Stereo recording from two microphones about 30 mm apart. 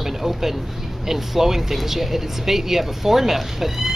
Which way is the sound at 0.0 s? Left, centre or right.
Centre.